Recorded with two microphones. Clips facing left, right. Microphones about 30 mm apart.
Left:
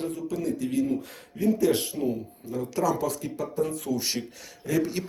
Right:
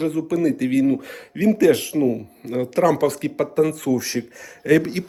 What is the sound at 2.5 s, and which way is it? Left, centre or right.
Speech, right.